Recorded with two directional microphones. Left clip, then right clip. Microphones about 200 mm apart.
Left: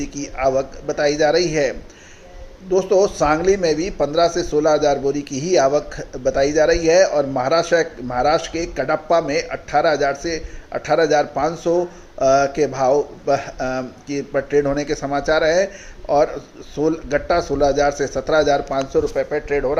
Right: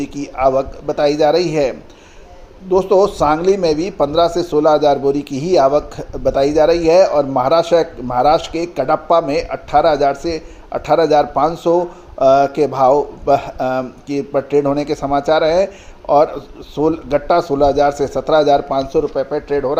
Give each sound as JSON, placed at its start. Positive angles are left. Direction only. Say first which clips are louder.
{"t": 0.4, "sound": "a man's voice", "louder": "right 4 dB", "side_deg": -45}
{"t": 2.7, "sound": "a man's voice", "louder": "right 3 dB", "side_deg": -45}